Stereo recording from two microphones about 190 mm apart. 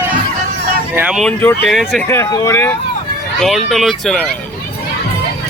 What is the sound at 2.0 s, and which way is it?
Speech, 15° left (ahead or behind).